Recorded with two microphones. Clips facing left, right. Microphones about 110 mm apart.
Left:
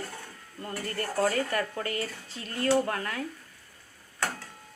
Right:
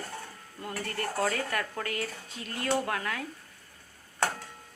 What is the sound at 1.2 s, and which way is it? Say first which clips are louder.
Speech: left 4 dB; centre (ahead or behind).